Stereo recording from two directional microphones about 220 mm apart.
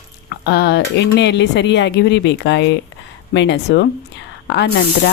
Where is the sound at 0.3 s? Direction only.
50° left (ahead or behind).